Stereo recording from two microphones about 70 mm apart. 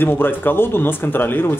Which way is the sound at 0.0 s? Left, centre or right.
Left.